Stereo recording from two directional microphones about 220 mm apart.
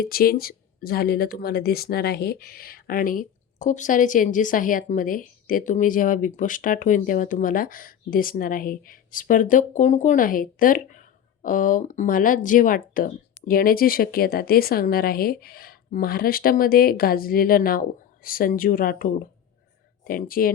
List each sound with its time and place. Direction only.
0.0 s speech: 45° left (ahead or behind)